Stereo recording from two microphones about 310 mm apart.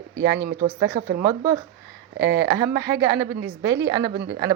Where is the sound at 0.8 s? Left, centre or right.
Right.